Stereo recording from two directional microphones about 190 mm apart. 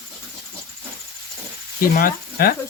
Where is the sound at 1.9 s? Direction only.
45° left (ahead or behind).